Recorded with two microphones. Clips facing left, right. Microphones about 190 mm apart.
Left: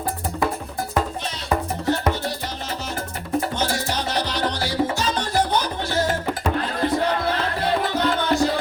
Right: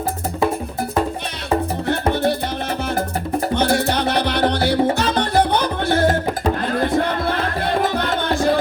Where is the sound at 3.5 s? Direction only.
60° right (ahead or behind).